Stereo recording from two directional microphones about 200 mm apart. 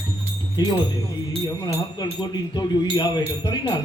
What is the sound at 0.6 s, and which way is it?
Speech, 20° left (ahead or behind).